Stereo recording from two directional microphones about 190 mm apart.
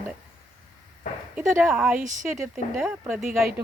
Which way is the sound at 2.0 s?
40° right (ahead or behind).